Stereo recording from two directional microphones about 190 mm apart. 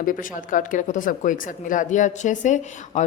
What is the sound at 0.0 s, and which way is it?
A woman's voice, 45° left (ahead or behind).